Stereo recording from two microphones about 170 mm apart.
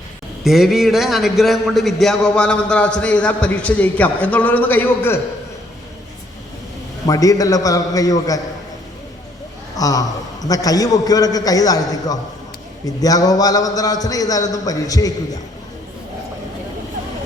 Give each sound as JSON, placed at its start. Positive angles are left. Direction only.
{"t": 0.4, "sound": "a man's voice", "side_deg": 0}
{"t": 7.1, "sound": "a man's voice", "side_deg": 20}
{"t": 9.7, "sound": "a man's voice", "side_deg": 20}